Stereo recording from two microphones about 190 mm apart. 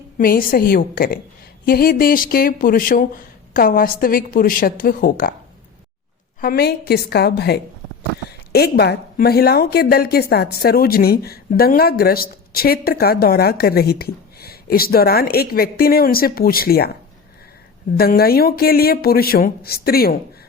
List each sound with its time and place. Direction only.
0.2 s a woman's voice: 50° left (ahead or behind)
6.4 s a woman's voice: 55° left (ahead or behind)
17.9 s a woman's voice: 55° left (ahead or behind)